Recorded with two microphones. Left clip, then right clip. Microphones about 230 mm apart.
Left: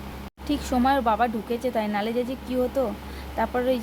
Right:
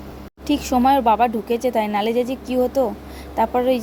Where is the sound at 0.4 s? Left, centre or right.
Centre.